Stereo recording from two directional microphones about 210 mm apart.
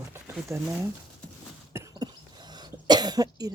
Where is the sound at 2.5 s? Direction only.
20° right (ahead or behind).